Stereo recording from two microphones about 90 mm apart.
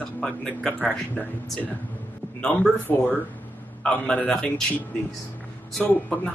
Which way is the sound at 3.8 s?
15° left (ahead or behind).